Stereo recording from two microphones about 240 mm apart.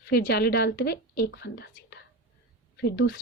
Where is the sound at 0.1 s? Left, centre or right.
Left.